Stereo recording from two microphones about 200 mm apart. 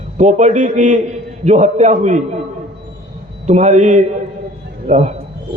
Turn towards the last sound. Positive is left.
turn(degrees=-35)  # may be behind; listen again after turning